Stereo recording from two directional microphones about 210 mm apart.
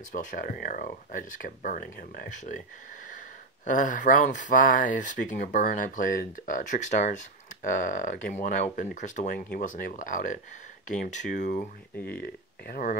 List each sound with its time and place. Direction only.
0.1 s speech: 40° left (ahead or behind)
3.6 s speech: 40° left (ahead or behind)
12.1 s speech: 45° left (ahead or behind)